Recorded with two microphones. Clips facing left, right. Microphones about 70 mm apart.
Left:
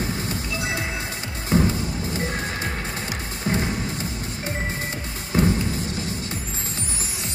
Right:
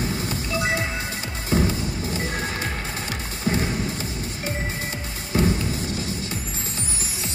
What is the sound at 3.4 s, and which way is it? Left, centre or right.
Music, left.